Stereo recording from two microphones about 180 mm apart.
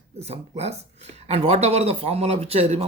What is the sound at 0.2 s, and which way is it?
Speech, 35° right (ahead or behind).